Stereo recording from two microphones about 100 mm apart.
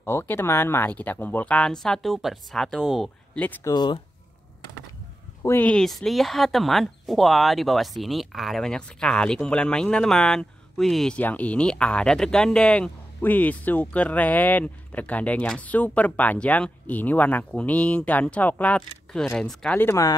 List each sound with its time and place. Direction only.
0.0 s speech: 20° left (ahead or behind); by 3.1 s centre (ahead or behind)
3.7 s speech: 50° left (ahead or behind)
5.4 s speech: 25° left (ahead or behind)
5.7 s speech: 5° left (ahead or behind)
11.1 s speech: 15° left (ahead or behind)